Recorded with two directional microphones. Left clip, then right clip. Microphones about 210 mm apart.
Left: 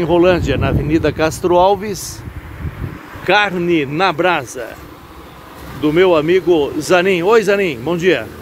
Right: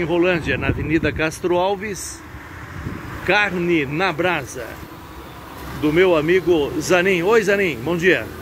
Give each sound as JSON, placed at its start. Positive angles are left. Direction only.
{"t": 0.0, "sound": "speech", "side_deg": 15}
{"t": 3.3, "sound": "speech", "side_deg": 20}
{"t": 5.8, "sound": "speech", "side_deg": 20}